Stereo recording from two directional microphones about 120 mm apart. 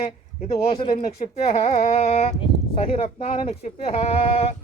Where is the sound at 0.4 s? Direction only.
50° left (ahead or behind).